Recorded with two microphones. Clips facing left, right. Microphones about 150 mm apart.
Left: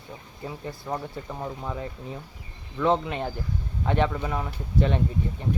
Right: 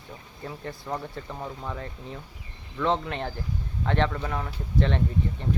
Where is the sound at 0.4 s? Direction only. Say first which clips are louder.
Left 1 dB; 10° left (ahead or behind).